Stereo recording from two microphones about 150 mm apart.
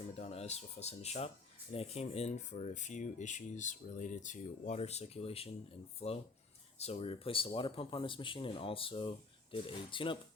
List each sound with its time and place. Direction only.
0.2 s speech: 45° left (ahead or behind)